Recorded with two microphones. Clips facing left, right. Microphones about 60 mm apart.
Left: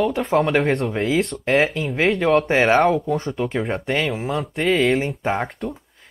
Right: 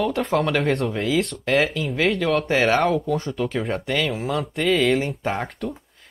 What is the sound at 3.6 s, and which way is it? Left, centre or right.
Speech, centre.